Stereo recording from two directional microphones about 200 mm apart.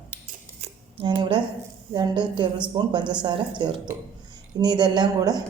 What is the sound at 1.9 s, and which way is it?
A woman's voice, 20° right (ahead or behind).